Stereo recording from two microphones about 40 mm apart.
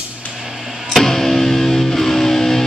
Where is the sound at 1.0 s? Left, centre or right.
Centre.